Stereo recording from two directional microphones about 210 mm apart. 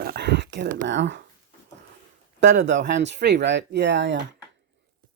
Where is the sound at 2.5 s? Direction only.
60° right (ahead or behind).